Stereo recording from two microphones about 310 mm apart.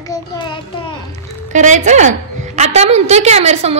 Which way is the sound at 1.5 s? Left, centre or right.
Right.